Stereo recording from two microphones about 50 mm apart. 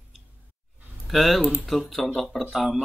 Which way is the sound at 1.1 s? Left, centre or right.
Centre.